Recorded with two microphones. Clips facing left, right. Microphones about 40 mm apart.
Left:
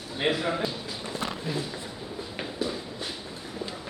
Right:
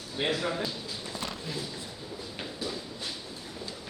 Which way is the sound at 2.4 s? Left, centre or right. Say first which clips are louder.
Left 5 dB; left.